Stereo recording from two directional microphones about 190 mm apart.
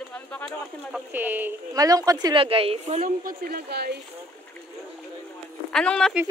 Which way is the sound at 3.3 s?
55° right (ahead or behind).